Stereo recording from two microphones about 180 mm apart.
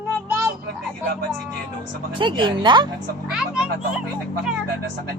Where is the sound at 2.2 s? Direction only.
25° right (ahead or behind).